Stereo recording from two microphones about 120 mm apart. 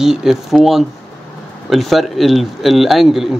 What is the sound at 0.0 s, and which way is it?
Speech, 5° right (ahead or behind).